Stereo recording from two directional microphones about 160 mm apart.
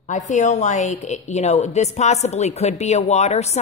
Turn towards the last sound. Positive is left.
turn(degrees=45)  # may be behind; listen again after turning